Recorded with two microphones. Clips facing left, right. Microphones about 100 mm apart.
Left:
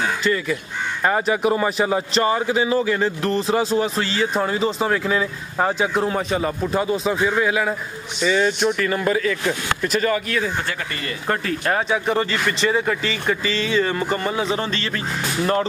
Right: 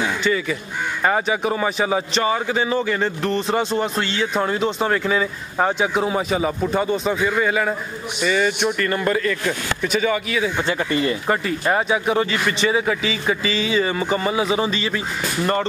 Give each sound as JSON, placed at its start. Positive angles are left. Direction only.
{"t": 0.2, "sound": "a man's voice", "side_deg": 0}
{"t": 10.9, "sound": "speech", "side_deg": -20}
{"t": 11.2, "sound": "a man's voice", "side_deg": -5}